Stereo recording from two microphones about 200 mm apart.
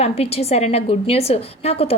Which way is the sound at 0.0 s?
30° left (ahead or behind).